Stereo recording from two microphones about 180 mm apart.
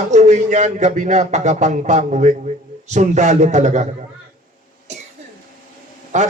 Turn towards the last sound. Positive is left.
turn(degrees=-40)  # may be behind; listen again after turning